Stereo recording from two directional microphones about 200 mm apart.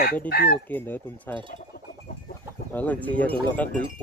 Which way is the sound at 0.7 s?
10° left (ahead or behind).